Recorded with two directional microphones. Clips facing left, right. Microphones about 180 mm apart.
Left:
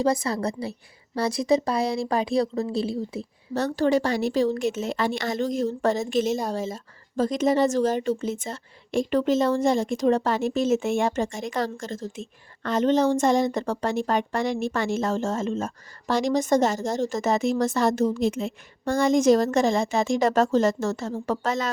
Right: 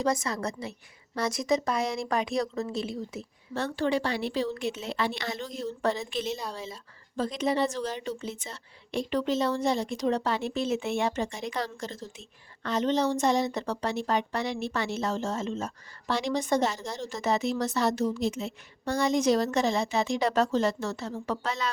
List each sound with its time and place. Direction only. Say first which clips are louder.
0.0 s a woman's voice: left 5 dB; 30° left (ahead or behind)